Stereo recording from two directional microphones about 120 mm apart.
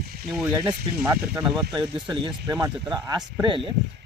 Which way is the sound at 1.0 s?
15° right (ahead or behind).